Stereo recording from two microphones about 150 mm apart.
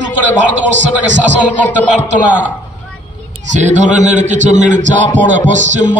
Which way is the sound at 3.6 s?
50° right (ahead or behind).